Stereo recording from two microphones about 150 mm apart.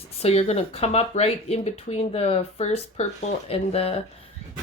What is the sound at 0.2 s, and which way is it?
Speech, 40° left (ahead or behind).